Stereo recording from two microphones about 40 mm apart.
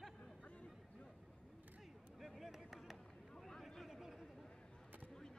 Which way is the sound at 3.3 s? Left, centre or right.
Centre.